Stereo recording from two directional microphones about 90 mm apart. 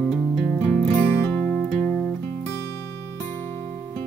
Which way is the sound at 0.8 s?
15° left (ahead or behind).